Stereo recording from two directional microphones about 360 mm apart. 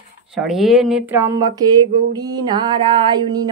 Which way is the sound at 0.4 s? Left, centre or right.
Centre.